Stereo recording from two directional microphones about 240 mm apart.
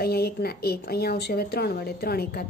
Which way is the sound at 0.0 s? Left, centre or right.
Left.